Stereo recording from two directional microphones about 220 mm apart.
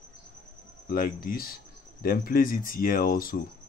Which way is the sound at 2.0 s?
40° left (ahead or behind).